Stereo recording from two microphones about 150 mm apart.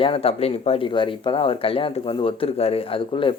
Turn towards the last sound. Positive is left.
turn(degrees=35)  # may be behind; listen again after turning